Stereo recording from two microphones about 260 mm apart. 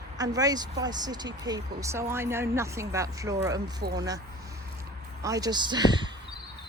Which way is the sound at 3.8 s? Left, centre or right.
Right.